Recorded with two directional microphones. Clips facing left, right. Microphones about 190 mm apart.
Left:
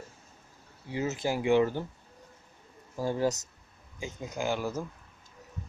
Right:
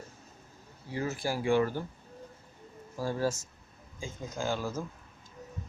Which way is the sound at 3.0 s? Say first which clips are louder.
Left 2 dB; 20° left (ahead or behind).